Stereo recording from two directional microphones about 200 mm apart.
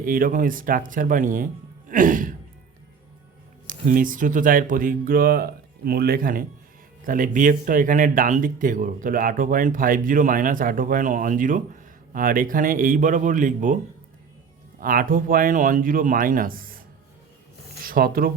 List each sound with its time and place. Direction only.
0.0 s speech: 45° right (ahead or behind)
3.7 s speech: 45° right (ahead or behind)
14.8 s speech: 45° right (ahead or behind)
17.8 s speech: 45° right (ahead or behind)